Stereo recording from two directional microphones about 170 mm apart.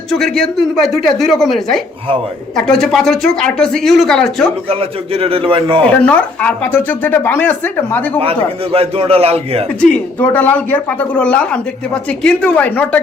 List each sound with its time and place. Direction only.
0.1 s speech: 5° left (ahead or behind)
4.7 s a man's voice: 35° right (ahead or behind)
5.8 s speech: 10° left (ahead or behind)
8.2 s a man's voice: 35° right (ahead or behind)
9.8 s speech: 5° left (ahead or behind)